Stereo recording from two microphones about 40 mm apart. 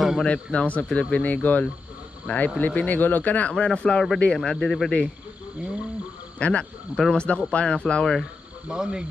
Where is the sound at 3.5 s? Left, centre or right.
Left.